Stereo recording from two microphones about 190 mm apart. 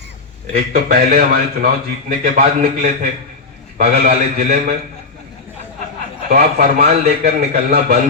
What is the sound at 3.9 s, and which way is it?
Speech, 40° right (ahead or behind).